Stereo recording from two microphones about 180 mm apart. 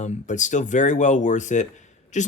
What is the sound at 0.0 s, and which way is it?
Speech, 40° left (ahead or behind).